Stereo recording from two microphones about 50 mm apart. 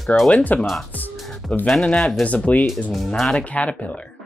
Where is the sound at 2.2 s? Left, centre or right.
Left.